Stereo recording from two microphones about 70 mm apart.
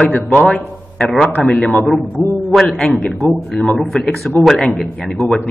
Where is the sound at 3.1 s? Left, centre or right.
Centre.